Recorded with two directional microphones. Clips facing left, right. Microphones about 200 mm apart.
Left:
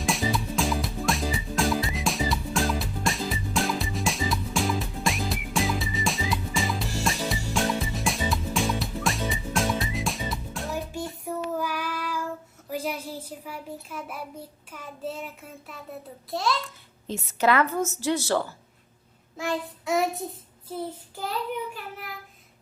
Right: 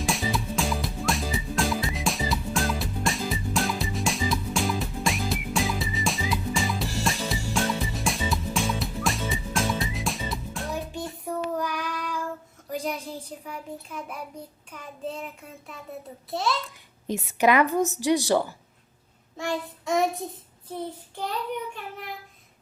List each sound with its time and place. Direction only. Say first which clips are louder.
0.0 s music: left 1 dB; centre (ahead or behind)
12.7 s a sound: even; 5° left (ahead or behind)
13.4 s a child's voice: even; 5° left (ahead or behind)
14.7 s child singing: even; 5° left (ahead or behind)
17.1 s a woman's voice: right 2 dB; 15° right (ahead or behind)
19.4 s child singing: even; centre (ahead or behind)